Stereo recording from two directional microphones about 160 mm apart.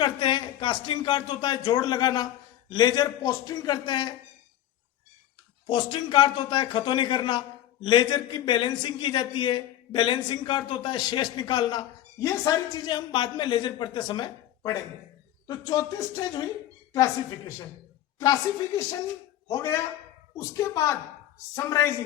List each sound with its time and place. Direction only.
0.0 s a man's voice: 30° left (ahead or behind)
5.6 s a man's voice: 30° left (ahead or behind)
19.5 s a man's voice: 20° left (ahead or behind)